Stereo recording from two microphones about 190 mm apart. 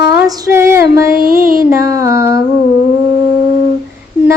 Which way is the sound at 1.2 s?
50° right (ahead or behind).